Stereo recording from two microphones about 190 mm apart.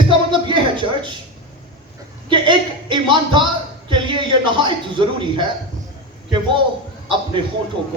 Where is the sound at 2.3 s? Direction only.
25° right (ahead or behind).